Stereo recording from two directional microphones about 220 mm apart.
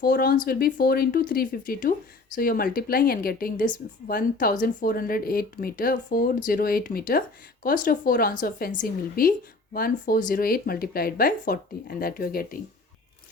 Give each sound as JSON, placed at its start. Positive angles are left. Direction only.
{"t": 0.0, "sound": "speech", "side_deg": 40}